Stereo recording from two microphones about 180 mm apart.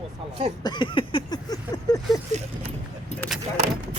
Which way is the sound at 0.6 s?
25° left (ahead or behind).